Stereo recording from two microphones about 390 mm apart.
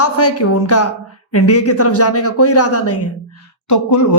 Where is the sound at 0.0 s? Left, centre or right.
Left.